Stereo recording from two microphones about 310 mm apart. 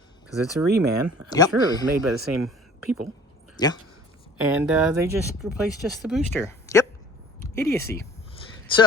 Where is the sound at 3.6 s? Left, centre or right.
Centre.